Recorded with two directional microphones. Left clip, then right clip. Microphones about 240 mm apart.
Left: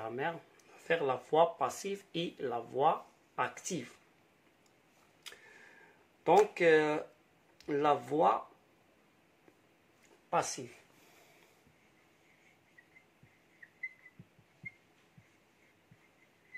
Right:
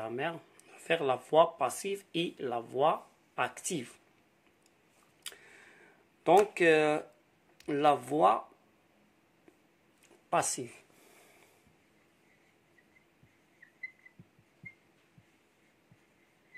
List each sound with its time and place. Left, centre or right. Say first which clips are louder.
0.0 s speech: right 1 dB; right
6.2 s speech: right 2 dB; right
10.3 s a sound: right 3 dB; right